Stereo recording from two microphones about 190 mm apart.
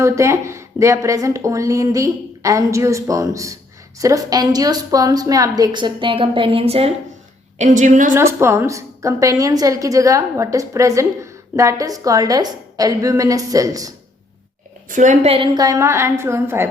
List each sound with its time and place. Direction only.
0.0 s a woman's voice: 15° right (ahead or behind); by 8.1 s 40° right (ahead or behind)
8.1 s a woman's voice: 15° right (ahead or behind)
14.8 s a woman's voice: 40° right (ahead or behind)
15.6 s a woman's voice: 15° right (ahead or behind)